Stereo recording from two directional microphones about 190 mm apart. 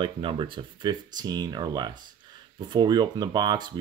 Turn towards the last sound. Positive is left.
turn(degrees=-20)  # may be behind; listen again after turning